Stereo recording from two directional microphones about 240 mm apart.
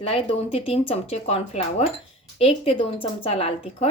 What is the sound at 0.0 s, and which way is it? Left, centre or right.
Speech, left.